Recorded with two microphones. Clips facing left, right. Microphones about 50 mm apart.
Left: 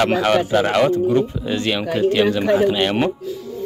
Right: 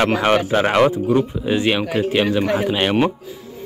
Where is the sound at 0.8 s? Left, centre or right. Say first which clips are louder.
Even; centre.